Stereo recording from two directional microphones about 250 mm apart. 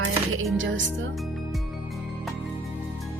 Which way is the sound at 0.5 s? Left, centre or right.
Right.